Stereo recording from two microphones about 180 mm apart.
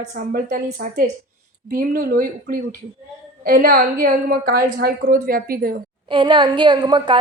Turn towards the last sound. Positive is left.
turn(degrees=-25)  # may be behind; listen again after turning